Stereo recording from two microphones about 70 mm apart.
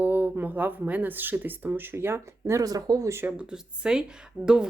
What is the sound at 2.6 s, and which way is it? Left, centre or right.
Speech, right.